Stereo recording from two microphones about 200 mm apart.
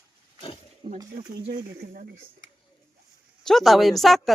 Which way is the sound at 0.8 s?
20° right (ahead or behind).